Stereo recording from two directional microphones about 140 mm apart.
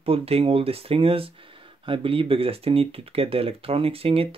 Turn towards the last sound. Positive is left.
turn(degrees=-45)  # may be behind; listen again after turning